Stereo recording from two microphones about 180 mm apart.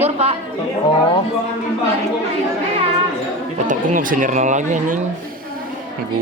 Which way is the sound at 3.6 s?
45° right (ahead or behind).